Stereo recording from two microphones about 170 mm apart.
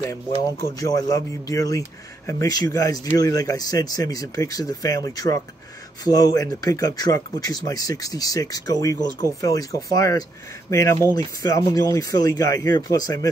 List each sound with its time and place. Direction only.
0.7 s speech: 20° left (ahead or behind)